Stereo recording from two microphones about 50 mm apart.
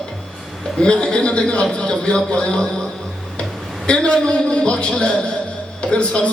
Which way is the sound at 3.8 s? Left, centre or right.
Left.